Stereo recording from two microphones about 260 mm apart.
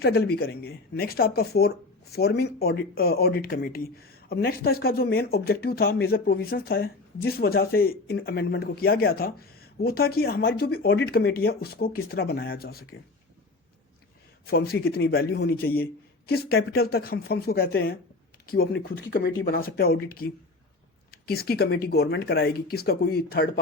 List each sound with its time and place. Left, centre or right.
0.0 s speech: left
14.4 s speech: left